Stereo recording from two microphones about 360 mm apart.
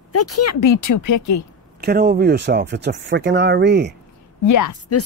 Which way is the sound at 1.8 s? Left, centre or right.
Right.